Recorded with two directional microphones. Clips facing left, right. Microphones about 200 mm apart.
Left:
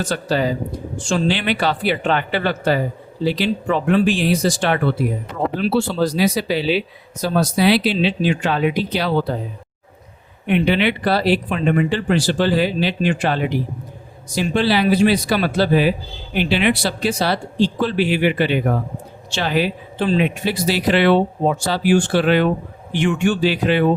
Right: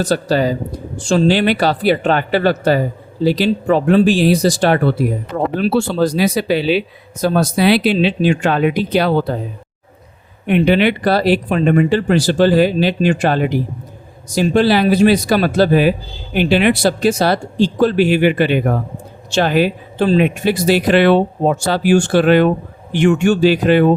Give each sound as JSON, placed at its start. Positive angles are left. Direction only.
{"t": 0.0, "sound": "a man's voice", "side_deg": -40}
{"t": 10.4, "sound": "a man's voice", "side_deg": -45}